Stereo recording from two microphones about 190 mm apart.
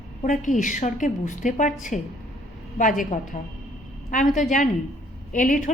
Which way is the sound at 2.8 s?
45° left (ahead or behind).